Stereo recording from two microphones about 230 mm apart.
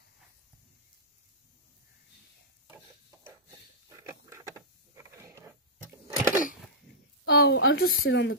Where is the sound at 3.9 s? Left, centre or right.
Centre.